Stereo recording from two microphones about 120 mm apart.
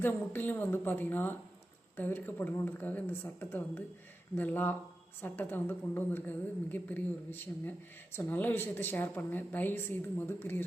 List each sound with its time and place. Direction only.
0.0 s a woman's voice: 15° left (ahead or behind)